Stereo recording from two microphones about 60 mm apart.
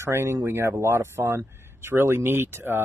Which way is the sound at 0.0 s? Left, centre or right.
Right.